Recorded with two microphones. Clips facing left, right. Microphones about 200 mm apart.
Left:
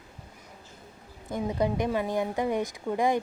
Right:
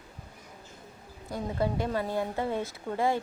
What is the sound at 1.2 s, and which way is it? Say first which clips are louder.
Speech: left 3 dB; 20° left (ahead or behind).